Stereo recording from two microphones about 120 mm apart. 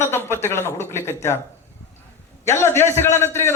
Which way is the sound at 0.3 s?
20° left (ahead or behind).